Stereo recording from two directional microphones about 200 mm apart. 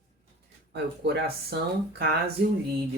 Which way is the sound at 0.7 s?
55° right (ahead or behind).